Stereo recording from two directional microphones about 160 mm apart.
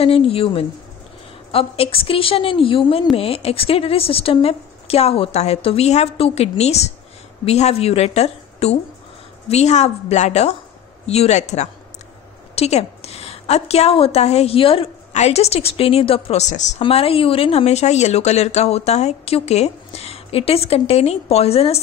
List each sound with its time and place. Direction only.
0.0 s a woman's voice: 35° left (ahead or behind)
16.8 s a woman's voice: 35° left (ahead or behind)